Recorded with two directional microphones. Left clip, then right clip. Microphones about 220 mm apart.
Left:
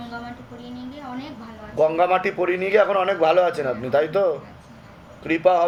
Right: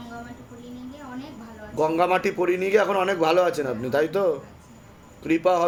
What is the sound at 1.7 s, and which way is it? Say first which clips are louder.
A man's voice: left 3 dB; 35° right (ahead or behind).